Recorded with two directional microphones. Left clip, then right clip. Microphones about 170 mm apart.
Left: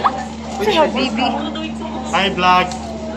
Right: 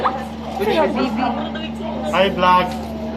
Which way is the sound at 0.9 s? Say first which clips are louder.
Left 2 dB; 40° right (ahead or behind).